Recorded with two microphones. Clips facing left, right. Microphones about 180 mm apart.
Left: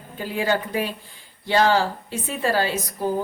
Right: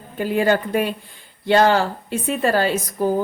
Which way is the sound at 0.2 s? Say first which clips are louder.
Right 5 dB; 55° right (ahead or behind).